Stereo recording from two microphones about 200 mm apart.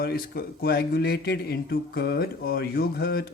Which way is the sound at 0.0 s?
50° left (ahead or behind).